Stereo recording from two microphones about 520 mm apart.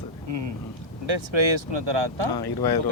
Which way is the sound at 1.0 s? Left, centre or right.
Right.